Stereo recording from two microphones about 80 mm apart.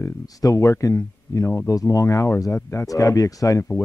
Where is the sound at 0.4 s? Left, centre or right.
Left.